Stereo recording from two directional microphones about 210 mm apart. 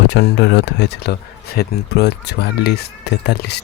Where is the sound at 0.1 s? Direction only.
55° left (ahead or behind).